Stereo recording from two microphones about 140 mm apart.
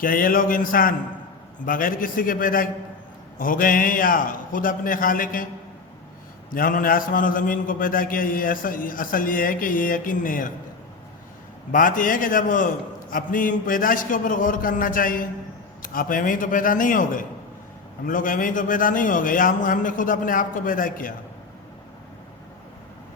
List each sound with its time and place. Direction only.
0.0 s a man's voice: 90° left
6.5 s a man's voice: 75° left (ahead or behind)
11.7 s a man's voice: 70° left (ahead or behind)